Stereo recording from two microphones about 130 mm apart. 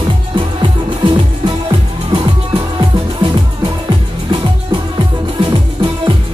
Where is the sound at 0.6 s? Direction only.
40° right (ahead or behind).